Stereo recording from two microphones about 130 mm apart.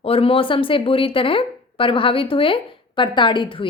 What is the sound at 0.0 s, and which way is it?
A woman's voice, 45° left (ahead or behind).